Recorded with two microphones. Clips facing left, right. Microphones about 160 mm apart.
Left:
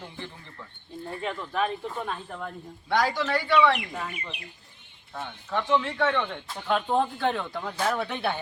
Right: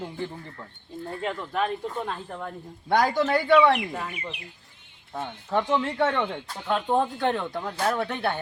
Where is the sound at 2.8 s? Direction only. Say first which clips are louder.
Right 3 dB; 50° right (ahead or behind).